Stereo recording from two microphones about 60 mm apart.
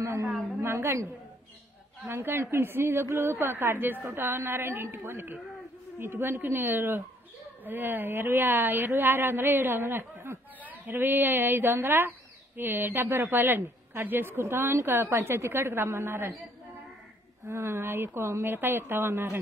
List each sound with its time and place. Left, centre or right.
0.0 s a sound: right
2.0 s a woman's voice: right
17.5 s a woman's voice: right